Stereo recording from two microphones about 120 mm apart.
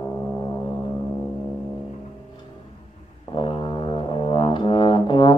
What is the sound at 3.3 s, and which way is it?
Brass instrument, 45° left (ahead or behind).